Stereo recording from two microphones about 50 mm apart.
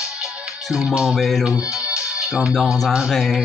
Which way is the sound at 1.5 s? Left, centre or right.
Right.